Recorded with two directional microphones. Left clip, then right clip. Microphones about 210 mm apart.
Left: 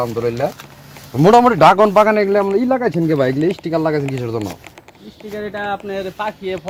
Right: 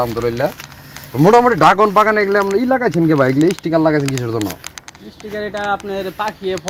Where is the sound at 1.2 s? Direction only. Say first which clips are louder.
Left 1 dB; 40° left (ahead or behind).